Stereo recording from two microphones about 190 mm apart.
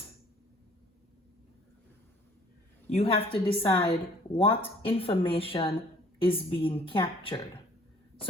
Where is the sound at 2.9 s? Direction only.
30° left (ahead or behind).